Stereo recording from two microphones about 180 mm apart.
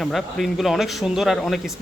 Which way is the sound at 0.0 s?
Centre (ahead or behind).